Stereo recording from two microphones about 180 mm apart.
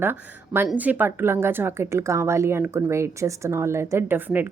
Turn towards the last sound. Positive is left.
turn(degrees=-10)  # may be behind; listen again after turning